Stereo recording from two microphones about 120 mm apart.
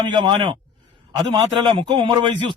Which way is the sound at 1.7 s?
40° right (ahead or behind).